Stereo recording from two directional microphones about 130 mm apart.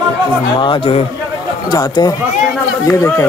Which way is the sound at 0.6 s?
40° left (ahead or behind).